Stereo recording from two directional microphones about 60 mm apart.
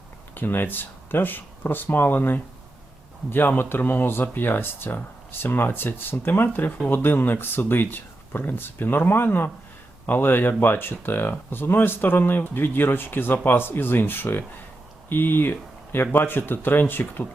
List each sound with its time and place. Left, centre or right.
0.3 s speech: left